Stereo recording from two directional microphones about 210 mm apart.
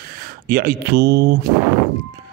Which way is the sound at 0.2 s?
40° right (ahead or behind).